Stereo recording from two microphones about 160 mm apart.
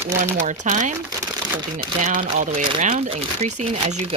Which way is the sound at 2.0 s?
55° right (ahead or behind).